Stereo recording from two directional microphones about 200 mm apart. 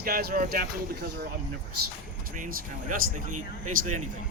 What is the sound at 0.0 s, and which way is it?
Speech, 50° right (ahead or behind).